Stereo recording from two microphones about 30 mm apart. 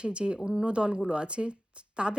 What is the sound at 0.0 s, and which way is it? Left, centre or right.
Speech, right.